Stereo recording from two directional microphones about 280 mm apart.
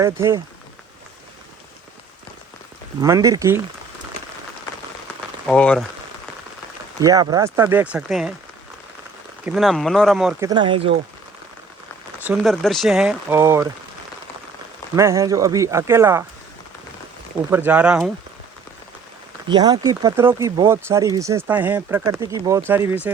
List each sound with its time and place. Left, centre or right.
0.0 s speech: centre
3.0 s speech: centre
5.5 s speech: centre
7.0 s speech: centre
9.5 s speech: centre
10.5 s speech: centre
12.2 s speech: centre
14.9 s speech: centre
17.5 s speech: centre
19.5 s speech: centre